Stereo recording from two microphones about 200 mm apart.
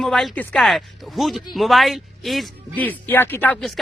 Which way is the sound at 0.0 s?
Centre (ahead or behind).